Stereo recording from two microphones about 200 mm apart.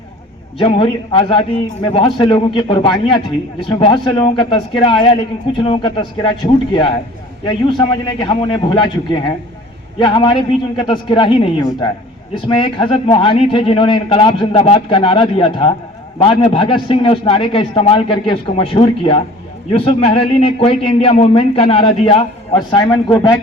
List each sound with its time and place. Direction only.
0.6 s a man's voice: 25° left (ahead or behind)